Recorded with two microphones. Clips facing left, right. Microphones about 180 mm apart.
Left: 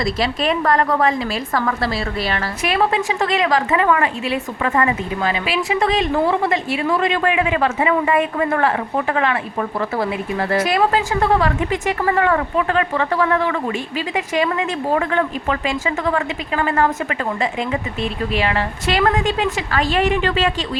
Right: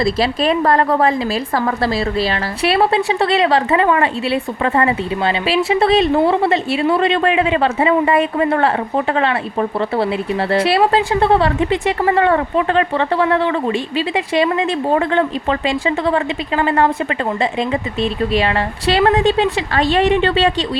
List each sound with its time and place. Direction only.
0.0 s a woman's voice: 35° right (ahead or behind)